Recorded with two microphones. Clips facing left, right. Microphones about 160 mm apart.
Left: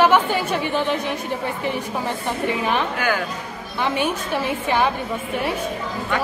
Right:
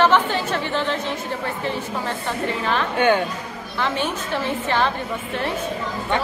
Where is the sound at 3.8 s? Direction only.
15° left (ahead or behind).